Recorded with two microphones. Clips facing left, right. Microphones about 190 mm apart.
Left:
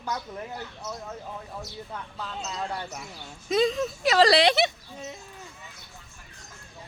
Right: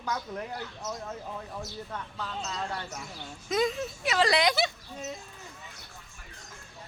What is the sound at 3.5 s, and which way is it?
Speech, 30° left (ahead or behind).